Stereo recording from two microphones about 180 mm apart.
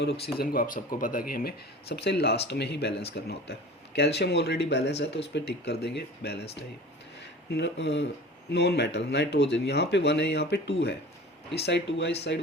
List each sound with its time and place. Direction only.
0.0 s speech: 65° left (ahead or behind)